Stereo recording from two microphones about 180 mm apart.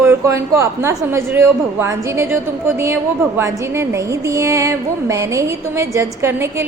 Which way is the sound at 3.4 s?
15° right (ahead or behind).